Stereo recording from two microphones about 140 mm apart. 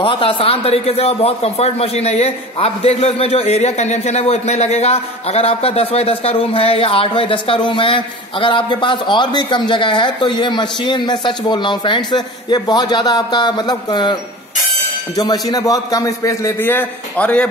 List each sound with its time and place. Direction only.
0.0 s a man's voice: 40° left (ahead or behind)
15.1 s a man's voice: 25° left (ahead or behind); by 17.5 s 10° left (ahead or behind)